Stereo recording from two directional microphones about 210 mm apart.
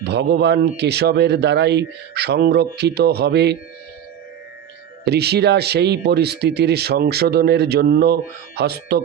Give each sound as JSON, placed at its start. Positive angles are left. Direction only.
{"t": 0.0, "sound": "speech", "side_deg": -55}
{"t": 5.0, "sound": "speech", "side_deg": -50}